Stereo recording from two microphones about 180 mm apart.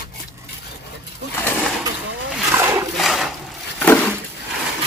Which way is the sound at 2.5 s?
15° right (ahead or behind).